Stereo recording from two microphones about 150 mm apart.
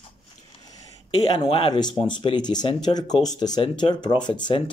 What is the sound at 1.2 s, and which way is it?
Speech, 30° left (ahead or behind).